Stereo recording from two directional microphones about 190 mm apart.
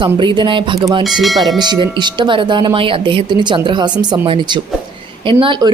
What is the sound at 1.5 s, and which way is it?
A woman's voice, 20° right (ahead or behind).